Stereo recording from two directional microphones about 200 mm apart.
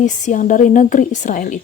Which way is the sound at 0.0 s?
40° left (ahead or behind).